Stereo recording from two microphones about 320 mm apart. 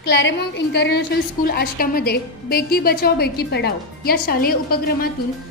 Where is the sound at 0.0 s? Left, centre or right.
Left.